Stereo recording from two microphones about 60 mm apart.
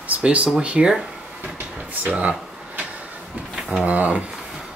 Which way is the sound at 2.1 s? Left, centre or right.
Right.